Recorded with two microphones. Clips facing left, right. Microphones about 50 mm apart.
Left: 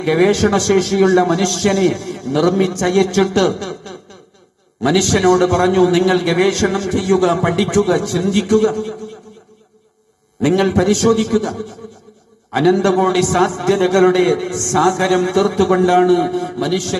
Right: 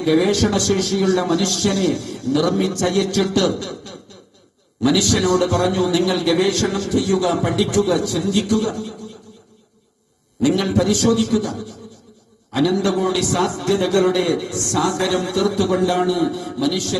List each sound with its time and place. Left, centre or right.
0.0 s a man's voice: left
10.4 s a man's voice: left